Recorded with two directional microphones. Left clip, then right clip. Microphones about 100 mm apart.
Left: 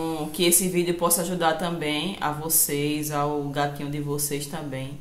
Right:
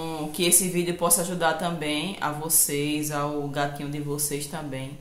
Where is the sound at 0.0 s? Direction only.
15° right (ahead or behind).